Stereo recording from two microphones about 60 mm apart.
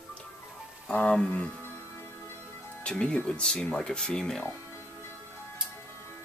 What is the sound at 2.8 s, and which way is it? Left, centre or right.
Speech, centre.